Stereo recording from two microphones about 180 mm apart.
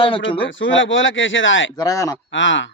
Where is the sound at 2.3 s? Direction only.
90° left.